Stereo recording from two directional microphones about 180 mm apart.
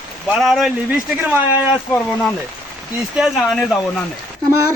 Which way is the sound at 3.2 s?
Centre (ahead or behind).